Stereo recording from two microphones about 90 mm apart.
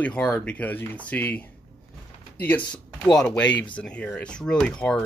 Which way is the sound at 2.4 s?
20° left (ahead or behind).